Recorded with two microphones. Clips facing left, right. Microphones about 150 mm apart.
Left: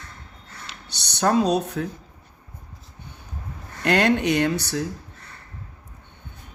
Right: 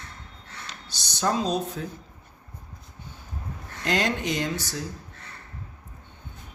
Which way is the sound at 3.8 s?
65° left (ahead or behind).